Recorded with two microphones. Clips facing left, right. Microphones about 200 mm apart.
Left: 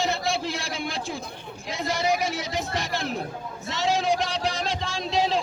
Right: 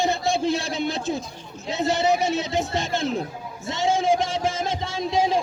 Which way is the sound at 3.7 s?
20° right (ahead or behind).